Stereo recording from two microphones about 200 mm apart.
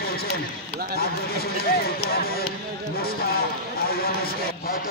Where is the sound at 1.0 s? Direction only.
50° left (ahead or behind).